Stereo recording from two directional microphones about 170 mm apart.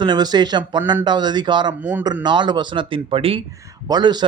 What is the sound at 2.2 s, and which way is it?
A man's voice, 25° right (ahead or behind).